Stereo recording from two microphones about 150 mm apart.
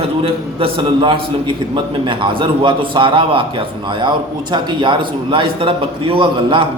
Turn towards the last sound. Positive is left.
turn(degrees=-35)  # may be behind; listen again after turning